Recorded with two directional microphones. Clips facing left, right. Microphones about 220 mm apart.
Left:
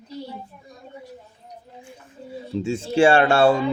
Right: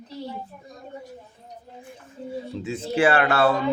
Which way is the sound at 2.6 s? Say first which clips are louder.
Left 4 dB; 30° left (ahead or behind).